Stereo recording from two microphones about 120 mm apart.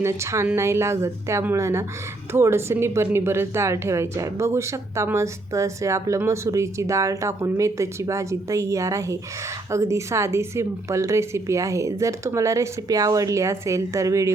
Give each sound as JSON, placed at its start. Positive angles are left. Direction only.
{"t": 0.0, "sound": "speech", "side_deg": -25}